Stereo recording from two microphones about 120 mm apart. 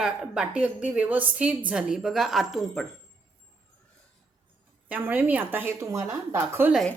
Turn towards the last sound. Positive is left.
turn(degrees=-15)  # may be behind; listen again after turning